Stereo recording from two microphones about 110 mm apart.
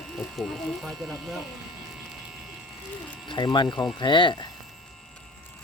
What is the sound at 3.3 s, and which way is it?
Speech, 45° left (ahead or behind).